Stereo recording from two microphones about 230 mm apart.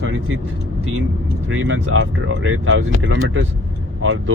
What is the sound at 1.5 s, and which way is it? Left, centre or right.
Speech, right.